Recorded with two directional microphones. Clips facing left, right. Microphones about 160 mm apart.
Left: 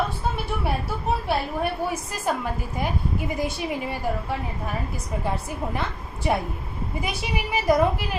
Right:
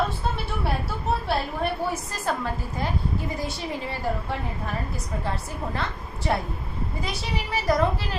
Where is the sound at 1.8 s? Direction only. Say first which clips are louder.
Left 1 dB; 15° left (ahead or behind).